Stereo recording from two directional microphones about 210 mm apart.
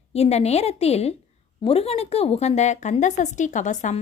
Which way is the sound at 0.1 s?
30° left (ahead or behind).